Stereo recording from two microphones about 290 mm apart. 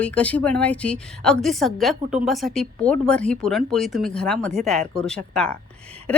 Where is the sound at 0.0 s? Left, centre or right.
Centre.